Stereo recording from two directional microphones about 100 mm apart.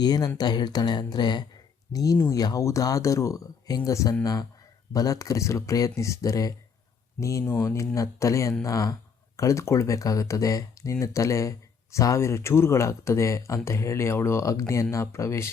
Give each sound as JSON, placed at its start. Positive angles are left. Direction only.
{"t": 0.0, "sound": "speech", "side_deg": 45}